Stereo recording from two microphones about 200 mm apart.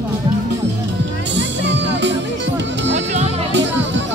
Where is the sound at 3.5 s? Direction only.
65° right (ahead or behind).